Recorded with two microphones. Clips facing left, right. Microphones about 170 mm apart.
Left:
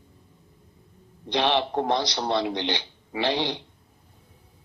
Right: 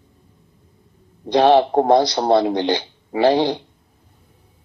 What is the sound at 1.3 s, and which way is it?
A man's voice, 45° right (ahead or behind).